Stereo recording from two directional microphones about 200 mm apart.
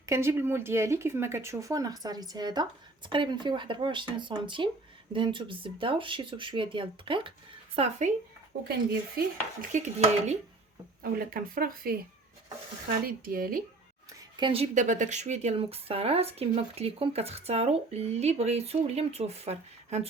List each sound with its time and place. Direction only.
0.0 s speech: 15° right (ahead or behind)
7.8 s speech: 35° right (ahead or behind)
8.6 s dishes: 50° right (ahead or behind)
13.1 s dishes: 45° right (ahead or behind)
14.1 s speech: 20° right (ahead or behind)